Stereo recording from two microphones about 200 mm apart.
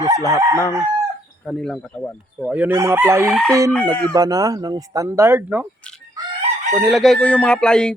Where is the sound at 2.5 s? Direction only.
10° right (ahead or behind).